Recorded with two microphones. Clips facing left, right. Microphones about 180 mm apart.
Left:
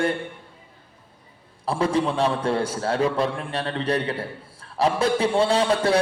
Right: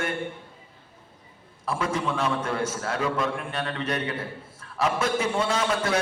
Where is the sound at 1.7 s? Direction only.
30° left (ahead or behind).